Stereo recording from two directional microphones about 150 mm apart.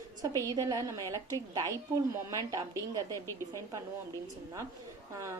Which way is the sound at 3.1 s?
20° left (ahead or behind).